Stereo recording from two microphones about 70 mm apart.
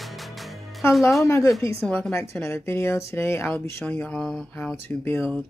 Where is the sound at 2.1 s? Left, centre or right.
Left.